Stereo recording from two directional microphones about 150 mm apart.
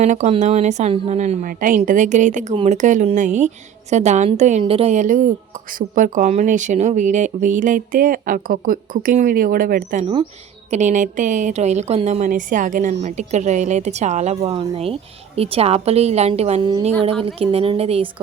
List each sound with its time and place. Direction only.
0.0 s speech: 50° right (ahead or behind)
4.6 s speech: 40° right (ahead or behind); by 10.0 s 75° right (ahead or behind)
10.7 s speech: 55° right (ahead or behind)